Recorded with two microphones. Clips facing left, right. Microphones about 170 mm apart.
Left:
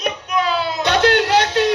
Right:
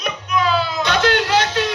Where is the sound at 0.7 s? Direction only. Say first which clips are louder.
Left 2 dB; 60° left (ahead or behind).